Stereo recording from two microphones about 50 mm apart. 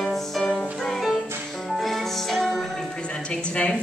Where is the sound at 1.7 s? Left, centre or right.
Centre.